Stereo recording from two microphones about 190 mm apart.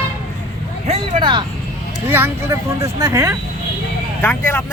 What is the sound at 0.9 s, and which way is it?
Speech, 25° right (ahead or behind).